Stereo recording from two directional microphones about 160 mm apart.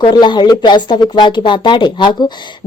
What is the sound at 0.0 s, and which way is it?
Speech, 30° left (ahead or behind).